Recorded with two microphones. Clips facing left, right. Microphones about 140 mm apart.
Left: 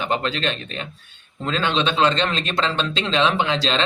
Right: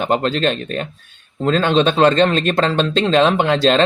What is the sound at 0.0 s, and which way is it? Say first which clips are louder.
Speech: right 6 dB; 45° right (ahead or behind).